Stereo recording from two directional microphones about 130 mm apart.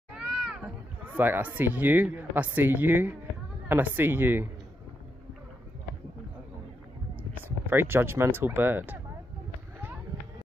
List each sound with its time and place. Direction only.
0.1 s cat: 5° right (ahead or behind)
1.0 s speech: 15° right (ahead or behind)
7.7 s speech: 15° right (ahead or behind)